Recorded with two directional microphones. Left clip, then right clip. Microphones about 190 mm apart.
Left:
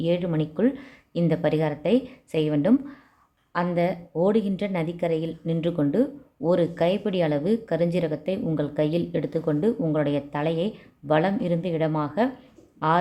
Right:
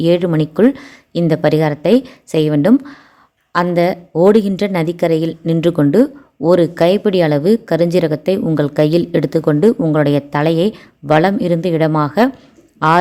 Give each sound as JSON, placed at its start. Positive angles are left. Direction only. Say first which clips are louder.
{"t": 0.0, "sound": "a woman's voice", "louder": "right 11 dB", "side_deg": -35}